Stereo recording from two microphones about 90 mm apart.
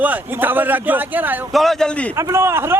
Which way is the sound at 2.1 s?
30° right (ahead or behind).